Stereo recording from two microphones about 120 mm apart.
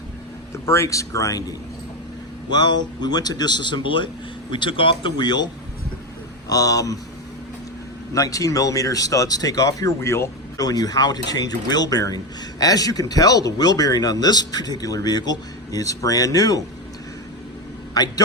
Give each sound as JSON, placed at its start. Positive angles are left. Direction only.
{"t": 0.6, "sound": "speech", "side_deg": 25}
{"t": 6.5, "sound": "speech", "side_deg": 30}
{"t": 8.1, "sound": "speech", "side_deg": 30}